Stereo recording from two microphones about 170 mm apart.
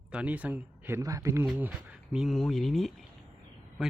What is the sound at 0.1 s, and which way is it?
A man's voice, 5° right (ahead or behind).